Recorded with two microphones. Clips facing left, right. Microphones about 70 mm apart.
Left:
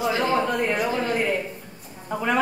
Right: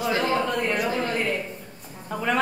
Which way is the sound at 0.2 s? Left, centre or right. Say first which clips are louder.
Left 2 dB; centre.